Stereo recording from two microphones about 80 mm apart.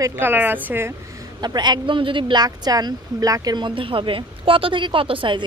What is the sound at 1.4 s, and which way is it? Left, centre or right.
Speech, right.